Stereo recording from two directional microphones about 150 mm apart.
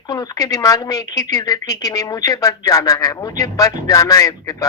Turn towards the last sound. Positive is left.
turn(degrees=25)  # may be behind; listen again after turning